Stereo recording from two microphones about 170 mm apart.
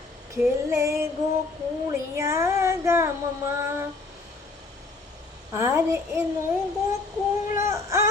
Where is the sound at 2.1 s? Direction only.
15° right (ahead or behind).